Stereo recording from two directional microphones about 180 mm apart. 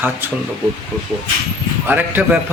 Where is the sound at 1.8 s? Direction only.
10° right (ahead or behind).